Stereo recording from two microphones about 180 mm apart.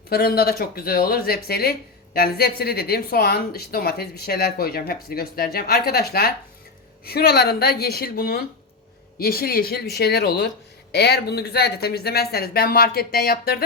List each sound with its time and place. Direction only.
0.1 s a woman's voice: 60° left (ahead or behind)